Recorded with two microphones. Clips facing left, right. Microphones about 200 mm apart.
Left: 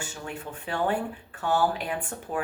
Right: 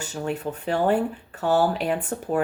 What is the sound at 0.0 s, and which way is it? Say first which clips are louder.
Speech: right 8 dB; 40° right (ahead or behind).